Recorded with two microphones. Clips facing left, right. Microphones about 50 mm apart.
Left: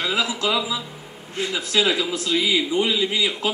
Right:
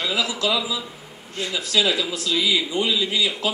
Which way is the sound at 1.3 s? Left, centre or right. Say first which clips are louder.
Left 1 dB; left.